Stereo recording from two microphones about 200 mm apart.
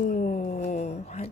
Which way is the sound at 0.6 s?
35° left (ahead or behind).